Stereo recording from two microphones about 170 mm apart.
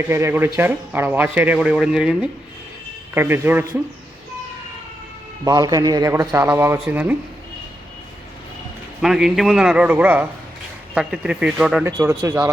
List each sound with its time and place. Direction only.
0.1 s speech: 15° right (ahead or behind)
5.5 s speech: 25° right (ahead or behind)
9.0 s a man's voice: 5° right (ahead or behind)